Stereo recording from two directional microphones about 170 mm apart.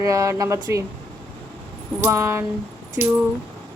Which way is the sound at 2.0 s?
15° right (ahead or behind).